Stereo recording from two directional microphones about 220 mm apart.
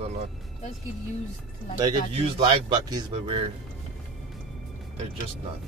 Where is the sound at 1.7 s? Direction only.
20° right (ahead or behind).